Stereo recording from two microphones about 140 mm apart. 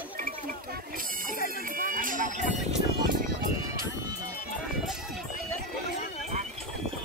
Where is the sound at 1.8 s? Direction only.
80° right; by 2.6 s 65° right (ahead or behind).